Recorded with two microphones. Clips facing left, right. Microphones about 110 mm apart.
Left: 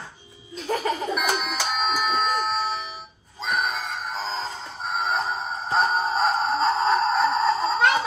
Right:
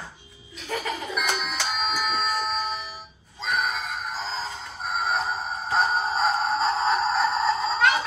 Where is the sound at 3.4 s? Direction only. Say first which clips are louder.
Left 1 dB; centre (ahead or behind).